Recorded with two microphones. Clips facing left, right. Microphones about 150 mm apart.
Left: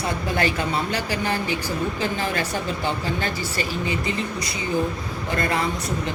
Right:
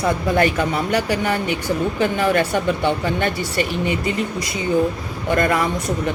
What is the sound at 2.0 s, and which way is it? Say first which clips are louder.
A woman's voice: right 7 dB; 65° right (ahead or behind).